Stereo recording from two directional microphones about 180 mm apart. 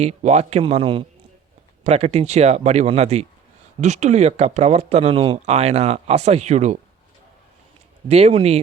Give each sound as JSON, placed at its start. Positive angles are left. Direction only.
{"t": 0.0, "sound": "speech", "side_deg": -40}
{"t": 8.0, "sound": "speech", "side_deg": -35}